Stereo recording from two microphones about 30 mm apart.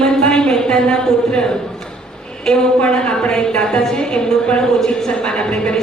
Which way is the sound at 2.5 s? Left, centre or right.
Left.